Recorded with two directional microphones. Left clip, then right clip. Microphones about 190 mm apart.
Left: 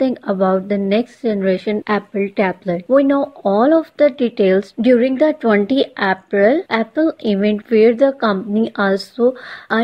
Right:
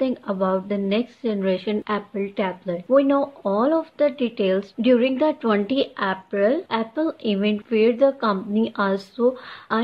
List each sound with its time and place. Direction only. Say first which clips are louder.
0.0 s a woman's voice: left 6 dB; 30° left (ahead or behind)